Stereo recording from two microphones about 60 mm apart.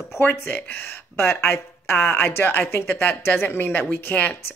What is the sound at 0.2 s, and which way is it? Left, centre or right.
Speech, left.